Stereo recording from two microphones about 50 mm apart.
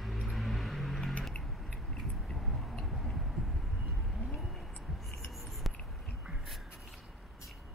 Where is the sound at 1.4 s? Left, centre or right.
Centre.